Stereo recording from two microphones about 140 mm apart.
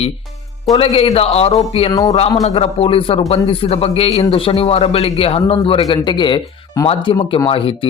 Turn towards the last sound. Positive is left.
turn(degrees=40)  # may be behind; listen again after turning